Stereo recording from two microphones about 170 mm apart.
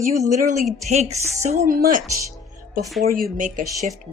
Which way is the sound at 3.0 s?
55° right (ahead or behind).